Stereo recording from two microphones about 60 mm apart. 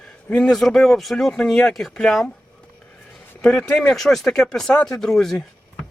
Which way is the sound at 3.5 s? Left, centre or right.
Centre.